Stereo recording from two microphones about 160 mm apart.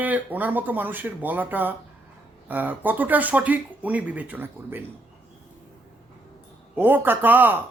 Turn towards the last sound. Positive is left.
turn(degrees=-10)  # may be behind; listen again after turning